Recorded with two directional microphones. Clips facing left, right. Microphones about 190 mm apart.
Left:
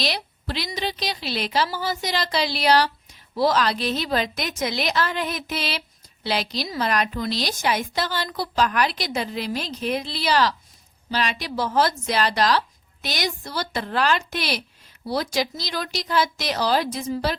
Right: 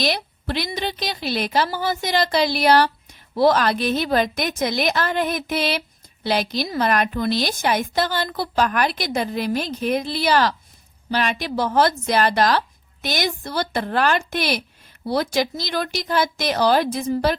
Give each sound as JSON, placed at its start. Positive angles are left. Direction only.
{"t": 0.0, "sound": "a woman's voice", "side_deg": -50}